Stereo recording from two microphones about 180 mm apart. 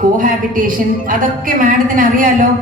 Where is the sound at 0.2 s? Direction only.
50° right (ahead or behind).